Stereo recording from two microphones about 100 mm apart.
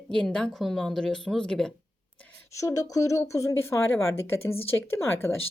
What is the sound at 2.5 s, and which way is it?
A woman's voice, 35° left (ahead or behind).